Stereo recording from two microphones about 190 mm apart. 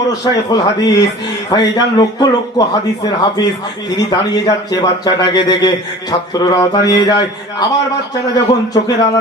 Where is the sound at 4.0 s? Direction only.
20° left (ahead or behind).